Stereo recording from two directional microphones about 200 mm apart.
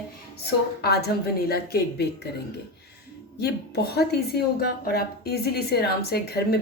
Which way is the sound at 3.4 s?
55° left (ahead or behind).